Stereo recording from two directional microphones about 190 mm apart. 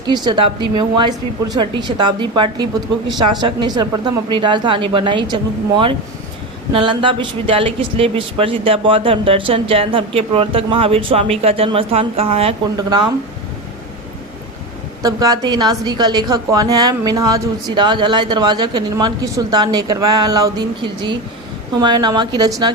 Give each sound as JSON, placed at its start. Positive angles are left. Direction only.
{"t": 0.3, "sound": "speech", "side_deg": -25}
{"t": 15.0, "sound": "speech", "side_deg": -20}